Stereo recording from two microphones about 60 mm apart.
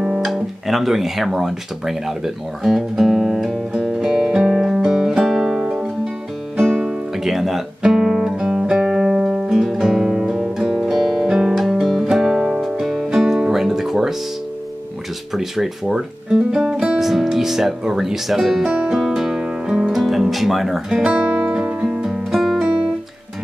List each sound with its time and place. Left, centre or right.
0.2 s guitar: centre
5.6 s music: centre
6.9 s guitar: centre
15.3 s speech: centre
19.4 s music: centre